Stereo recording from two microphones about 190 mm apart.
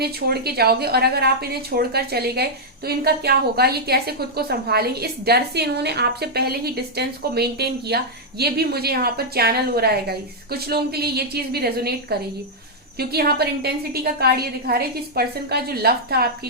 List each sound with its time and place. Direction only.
0.0 s a woman's voice: 55° right (ahead or behind)